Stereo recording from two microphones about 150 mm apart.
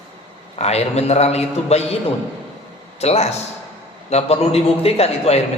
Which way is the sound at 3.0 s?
45° left (ahead or behind).